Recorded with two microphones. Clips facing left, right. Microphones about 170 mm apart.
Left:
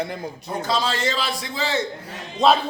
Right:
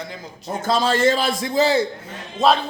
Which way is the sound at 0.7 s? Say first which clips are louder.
Right 7 dB; 50° right (ahead or behind).